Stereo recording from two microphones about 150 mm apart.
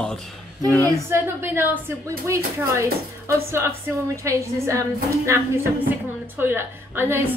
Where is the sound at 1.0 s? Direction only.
15° right (ahead or behind).